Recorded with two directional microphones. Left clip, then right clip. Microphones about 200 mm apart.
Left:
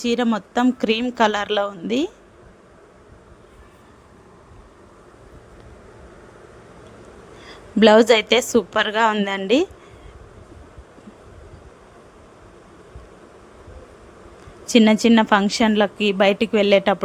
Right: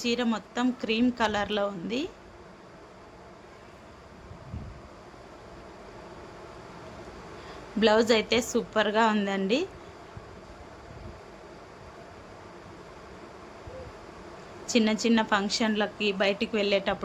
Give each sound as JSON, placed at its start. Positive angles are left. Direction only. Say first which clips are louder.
{"t": 0.0, "sound": "a woman's voice", "louder": "left 7 dB", "side_deg": 45}
{"t": 7.8, "sound": "a woman's voice", "louder": "left 10 dB", "side_deg": 50}
{"t": 14.7, "sound": "a woman's voice", "louder": "left 10 dB", "side_deg": 50}